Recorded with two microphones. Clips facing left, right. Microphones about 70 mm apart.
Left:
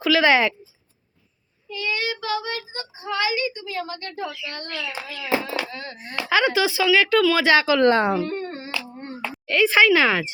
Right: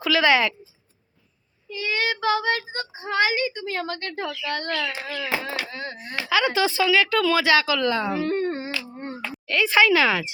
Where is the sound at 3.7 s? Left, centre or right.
Right.